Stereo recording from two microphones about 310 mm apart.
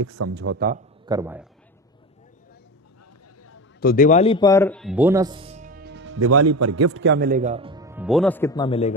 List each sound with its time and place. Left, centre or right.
0.0 s a man's voice: right
0.3 s a man's voice: right
1.0 s speech: centre
3.4 s a sound: left
3.9 s speech: left; by 7.0 s right
7.0 s speech: right; by 8.9 s centre